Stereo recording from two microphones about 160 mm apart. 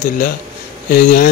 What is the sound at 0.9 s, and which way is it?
Speech, 65° left (ahead or behind).